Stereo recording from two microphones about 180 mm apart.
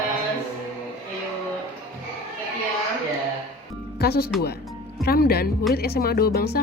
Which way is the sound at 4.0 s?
60° left (ahead or behind).